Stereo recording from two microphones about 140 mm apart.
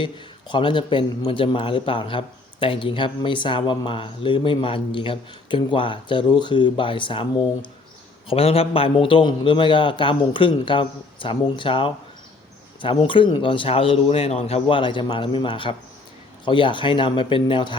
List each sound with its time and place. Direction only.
0.0 s a man's voice: 35° left (ahead or behind)